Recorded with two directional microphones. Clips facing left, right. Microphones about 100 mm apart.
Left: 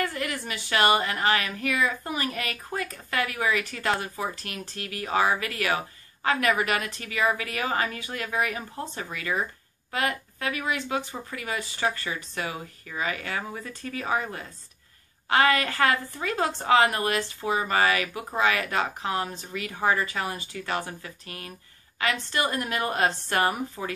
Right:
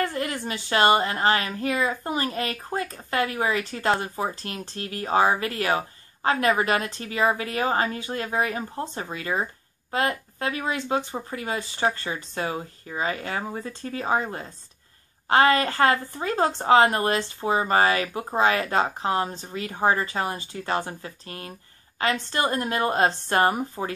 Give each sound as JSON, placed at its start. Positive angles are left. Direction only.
{"t": 0.0, "sound": "a woman's voice", "side_deg": -30}